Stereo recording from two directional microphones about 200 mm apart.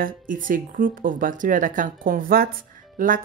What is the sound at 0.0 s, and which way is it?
A woman's voice, 45° right (ahead or behind).